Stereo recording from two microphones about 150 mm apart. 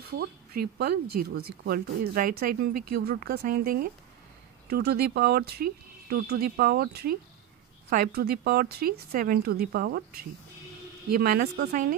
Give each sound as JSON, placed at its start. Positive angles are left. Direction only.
{"t": 0.2, "sound": "speech", "side_deg": -90}
{"t": 4.6, "sound": "a woman's voice", "side_deg": -90}